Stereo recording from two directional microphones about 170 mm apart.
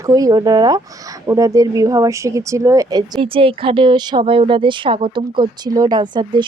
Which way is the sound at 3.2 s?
30° right (ahead or behind).